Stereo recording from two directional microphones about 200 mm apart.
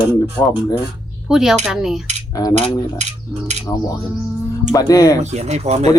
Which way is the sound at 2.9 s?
35° right (ahead or behind).